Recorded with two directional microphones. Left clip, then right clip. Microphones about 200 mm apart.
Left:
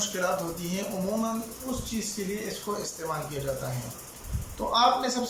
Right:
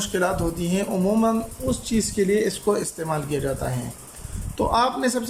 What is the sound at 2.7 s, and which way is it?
Speech, 40° right (ahead or behind).